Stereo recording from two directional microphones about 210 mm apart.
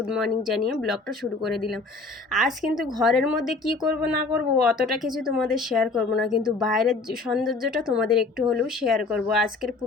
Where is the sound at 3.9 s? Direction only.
90° left.